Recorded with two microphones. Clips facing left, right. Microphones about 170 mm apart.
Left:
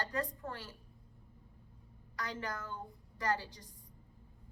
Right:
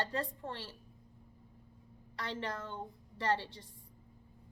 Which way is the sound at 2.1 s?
30° right (ahead or behind).